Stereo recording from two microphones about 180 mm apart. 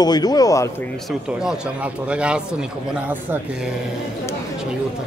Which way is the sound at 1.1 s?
5° right (ahead or behind).